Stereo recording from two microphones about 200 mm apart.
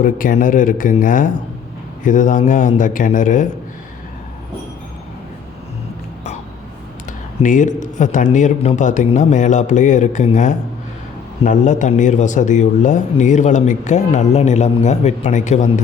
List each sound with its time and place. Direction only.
0.0 s a man's voice: 40° left (ahead or behind)
7.4 s a man's voice: 40° left (ahead or behind)